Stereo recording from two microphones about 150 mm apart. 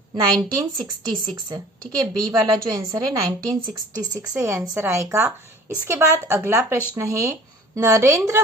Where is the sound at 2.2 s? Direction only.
25° right (ahead or behind).